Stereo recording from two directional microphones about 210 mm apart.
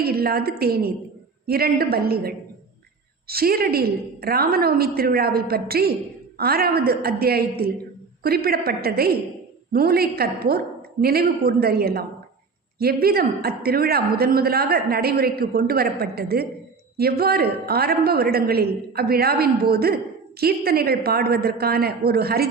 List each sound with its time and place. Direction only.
0.0 s a man's voice: 45° right (ahead or behind)